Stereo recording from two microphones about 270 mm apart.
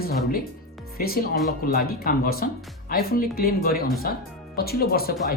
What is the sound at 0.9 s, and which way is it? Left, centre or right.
A woman's voice, left.